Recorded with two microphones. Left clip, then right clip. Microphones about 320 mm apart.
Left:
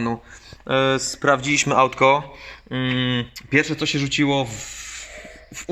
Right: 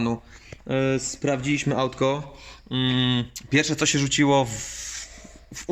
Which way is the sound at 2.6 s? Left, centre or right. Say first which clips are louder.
Left 1 dB; centre.